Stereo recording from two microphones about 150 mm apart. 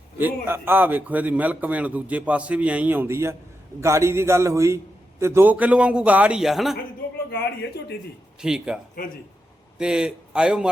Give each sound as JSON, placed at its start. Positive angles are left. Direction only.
{"t": 0.2, "sound": "a man's voice", "side_deg": -15}
{"t": 8.4, "sound": "a man's voice", "side_deg": -5}